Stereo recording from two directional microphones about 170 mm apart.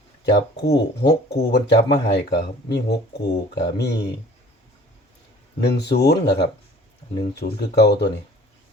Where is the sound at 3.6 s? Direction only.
80° left.